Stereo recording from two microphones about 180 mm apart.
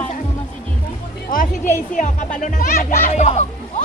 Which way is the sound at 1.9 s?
45° left (ahead or behind).